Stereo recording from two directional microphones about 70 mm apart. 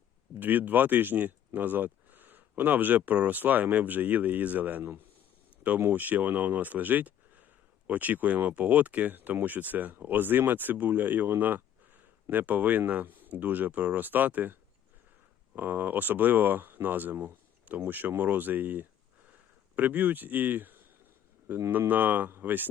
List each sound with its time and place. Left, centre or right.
0.3 s speech: right